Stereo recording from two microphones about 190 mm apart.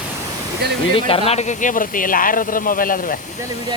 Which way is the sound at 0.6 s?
60° right (ahead or behind).